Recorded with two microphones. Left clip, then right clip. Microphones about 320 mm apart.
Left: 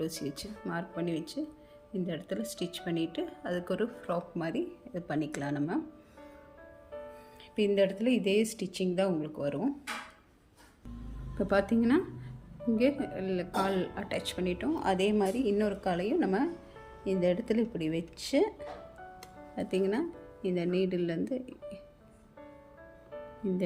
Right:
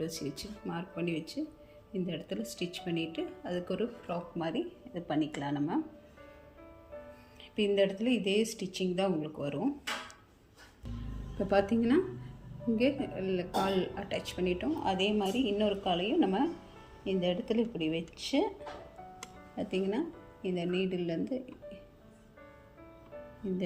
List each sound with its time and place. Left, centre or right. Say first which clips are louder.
0.0 s speech: left 1 dB; centre
7.5 s speech: left 1 dB; centre
11.4 s speech: even; centre
19.5 s speech: left 3 dB; centre